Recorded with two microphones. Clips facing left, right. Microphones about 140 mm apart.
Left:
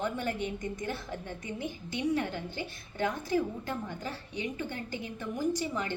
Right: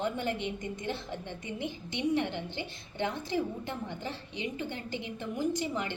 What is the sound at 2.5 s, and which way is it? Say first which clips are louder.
Speech: even; 45° left (ahead or behind).